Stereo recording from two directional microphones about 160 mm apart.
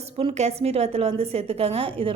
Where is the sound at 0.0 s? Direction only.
40° right (ahead or behind).